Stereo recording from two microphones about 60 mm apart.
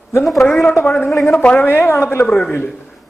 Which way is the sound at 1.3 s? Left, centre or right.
Left.